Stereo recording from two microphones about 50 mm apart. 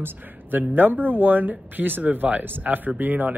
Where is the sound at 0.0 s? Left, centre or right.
Right.